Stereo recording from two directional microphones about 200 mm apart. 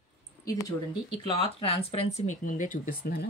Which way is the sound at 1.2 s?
30° left (ahead or behind).